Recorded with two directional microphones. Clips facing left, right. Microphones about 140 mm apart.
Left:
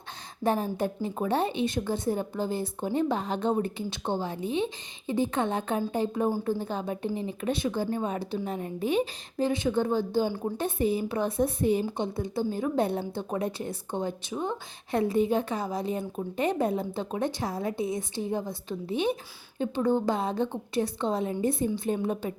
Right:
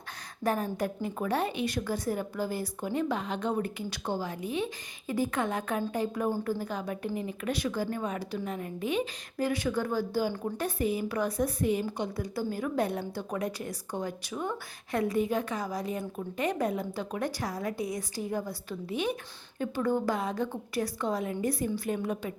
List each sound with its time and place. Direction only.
0.4 s a woman's voice: 25° left (ahead or behind)